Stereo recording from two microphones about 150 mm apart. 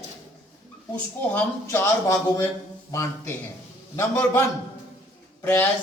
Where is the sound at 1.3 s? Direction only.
15° left (ahead or behind).